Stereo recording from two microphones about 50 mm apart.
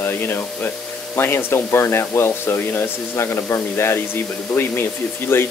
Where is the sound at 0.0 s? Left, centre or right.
Left.